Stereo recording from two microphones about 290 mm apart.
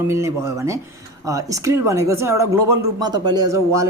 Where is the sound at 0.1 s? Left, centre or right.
Centre.